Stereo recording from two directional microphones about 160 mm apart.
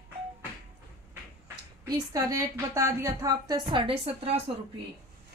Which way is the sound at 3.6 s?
35° right (ahead or behind).